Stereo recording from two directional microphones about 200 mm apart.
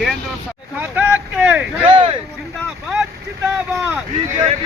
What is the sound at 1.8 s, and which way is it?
Speech, 25° right (ahead or behind).